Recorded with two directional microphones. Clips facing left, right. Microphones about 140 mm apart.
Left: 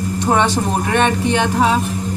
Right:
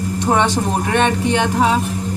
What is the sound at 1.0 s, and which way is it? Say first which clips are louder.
Speech: even; 25° right (ahead or behind).